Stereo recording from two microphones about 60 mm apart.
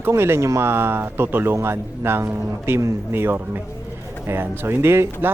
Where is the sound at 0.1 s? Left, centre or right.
Right.